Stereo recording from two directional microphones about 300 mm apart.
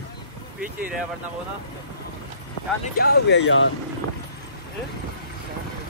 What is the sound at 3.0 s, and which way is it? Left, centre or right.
Speech, left.